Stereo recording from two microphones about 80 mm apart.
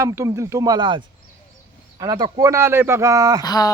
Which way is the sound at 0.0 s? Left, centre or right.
Right.